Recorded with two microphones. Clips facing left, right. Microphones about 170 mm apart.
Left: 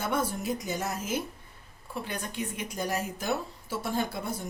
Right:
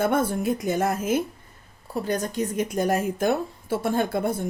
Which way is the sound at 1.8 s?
40° right (ahead or behind).